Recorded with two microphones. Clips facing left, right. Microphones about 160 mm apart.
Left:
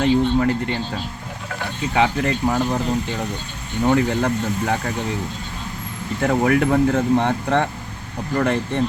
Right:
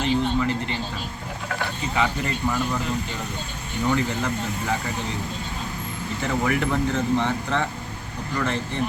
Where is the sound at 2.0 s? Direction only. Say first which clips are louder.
Left 6 dB; 60° left (ahead or behind).